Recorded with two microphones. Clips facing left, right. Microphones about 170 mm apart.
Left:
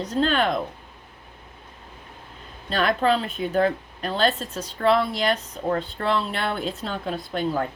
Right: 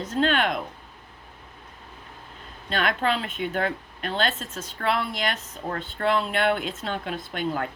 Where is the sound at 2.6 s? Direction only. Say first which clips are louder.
Left 4 dB; 35° left (ahead or behind).